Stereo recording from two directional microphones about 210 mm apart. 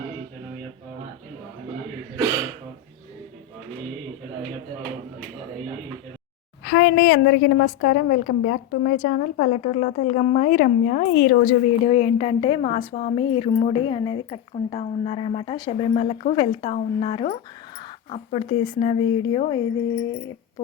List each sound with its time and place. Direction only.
6.7 s a woman's voice: 50° left (ahead or behind); by 19.5 s 25° left (ahead or behind)